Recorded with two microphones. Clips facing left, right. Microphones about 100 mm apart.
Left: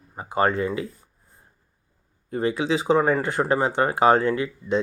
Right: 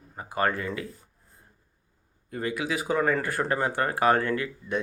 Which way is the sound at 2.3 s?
30° left (ahead or behind).